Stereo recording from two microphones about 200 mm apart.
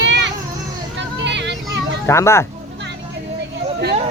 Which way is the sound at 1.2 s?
60° right (ahead or behind).